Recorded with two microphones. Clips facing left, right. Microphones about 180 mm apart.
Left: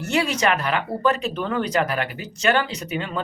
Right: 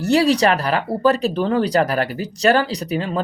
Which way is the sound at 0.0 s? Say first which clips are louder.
Right 7 dB; 35° right (ahead or behind).